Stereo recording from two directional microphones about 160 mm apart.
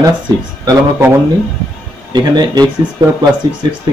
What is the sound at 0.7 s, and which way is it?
Speech, 15° right (ahead or behind).